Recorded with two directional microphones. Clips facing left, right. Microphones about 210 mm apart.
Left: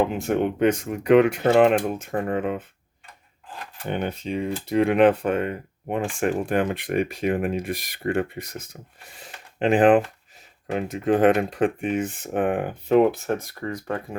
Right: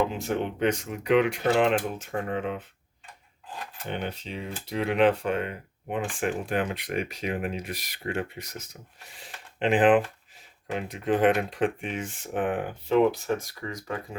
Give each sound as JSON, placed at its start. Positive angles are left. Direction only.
{"t": 0.1, "sound": "speech", "side_deg": 55}
{"t": 3.8, "sound": "speech", "side_deg": 50}